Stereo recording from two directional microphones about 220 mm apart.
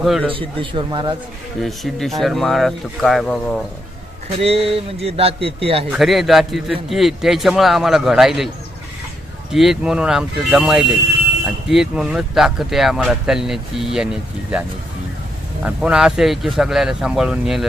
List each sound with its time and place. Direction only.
0.0 s speech: centre (ahead or behind)
0.3 s a man's voice: 25° right (ahead or behind)
1.6 s speech: centre (ahead or behind)
4.4 s a man's voice: 25° right (ahead or behind)
5.9 s speech: centre (ahead or behind)
9.5 s speech: centre (ahead or behind)
15.6 s speech: 5° right (ahead or behind)